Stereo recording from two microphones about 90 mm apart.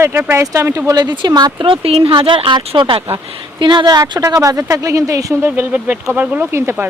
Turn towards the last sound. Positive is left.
turn(degrees=-25)  # may be behind; listen again after turning